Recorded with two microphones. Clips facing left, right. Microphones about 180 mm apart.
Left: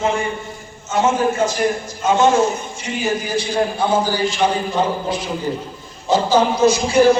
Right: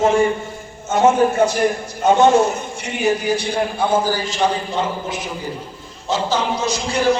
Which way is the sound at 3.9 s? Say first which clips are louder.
Left 1 dB; 45° right (ahead or behind).